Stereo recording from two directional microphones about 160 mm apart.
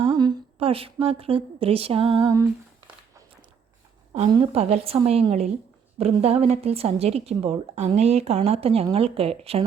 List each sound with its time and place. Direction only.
0.0 s a woman's voice: 30° right (ahead or behind)
4.3 s a woman's voice: 35° right (ahead or behind)